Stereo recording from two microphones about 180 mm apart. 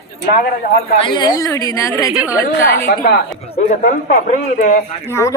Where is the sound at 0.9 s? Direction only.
25° left (ahead or behind).